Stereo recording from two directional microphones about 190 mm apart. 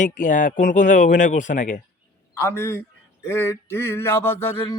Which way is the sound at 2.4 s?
15° left (ahead or behind).